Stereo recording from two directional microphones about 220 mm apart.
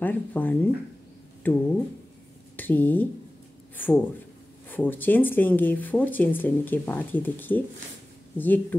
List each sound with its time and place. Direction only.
0.0 s speech: 10° left (ahead or behind)